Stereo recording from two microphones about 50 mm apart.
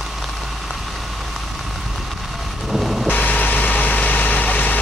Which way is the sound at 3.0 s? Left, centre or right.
Left.